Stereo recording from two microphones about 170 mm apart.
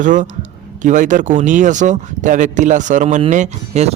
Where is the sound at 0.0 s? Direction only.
50° right (ahead or behind).